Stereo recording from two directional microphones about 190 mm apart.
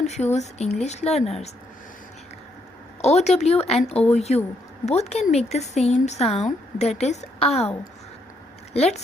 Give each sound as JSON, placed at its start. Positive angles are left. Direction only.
{"t": 0.0, "sound": "speech", "side_deg": 35}
{"t": 3.0, "sound": "speech", "side_deg": 35}